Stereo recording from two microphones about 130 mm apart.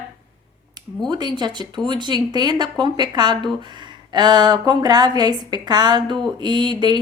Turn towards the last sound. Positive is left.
turn(degrees=-35)  # may be behind; listen again after turning